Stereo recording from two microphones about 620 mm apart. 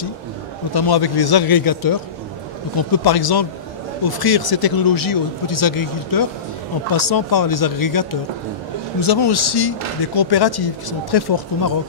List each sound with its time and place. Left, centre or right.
0.7 s speech: left